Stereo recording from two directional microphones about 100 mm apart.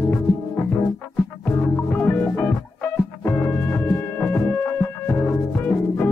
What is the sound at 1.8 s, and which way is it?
Music, 20° left (ahead or behind).